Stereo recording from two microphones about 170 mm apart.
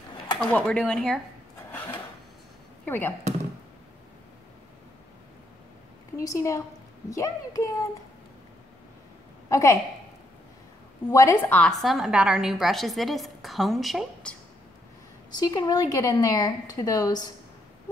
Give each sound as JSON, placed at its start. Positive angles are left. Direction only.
{"t": 0.4, "sound": "a woman's voice", "side_deg": 5}
{"t": 2.8, "sound": "speech", "side_deg": 10}
{"t": 6.1, "sound": "speech", "side_deg": 20}
{"t": 9.5, "sound": "a woman's voice", "side_deg": 20}
{"t": 11.1, "sound": "a woman's voice", "side_deg": 15}
{"t": 15.3, "sound": "speech", "side_deg": 25}